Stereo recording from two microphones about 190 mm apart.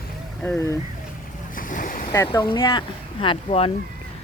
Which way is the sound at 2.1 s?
20° left (ahead or behind).